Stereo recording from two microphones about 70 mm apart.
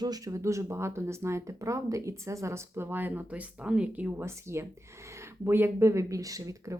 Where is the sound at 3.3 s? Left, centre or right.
Centre.